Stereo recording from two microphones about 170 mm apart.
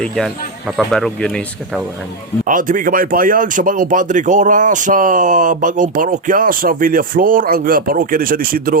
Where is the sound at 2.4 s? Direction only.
50° right (ahead or behind).